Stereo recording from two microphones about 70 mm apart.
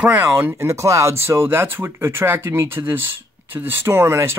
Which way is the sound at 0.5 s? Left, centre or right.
Right.